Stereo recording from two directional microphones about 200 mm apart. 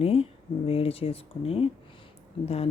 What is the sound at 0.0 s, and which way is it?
Speech, 30° left (ahead or behind).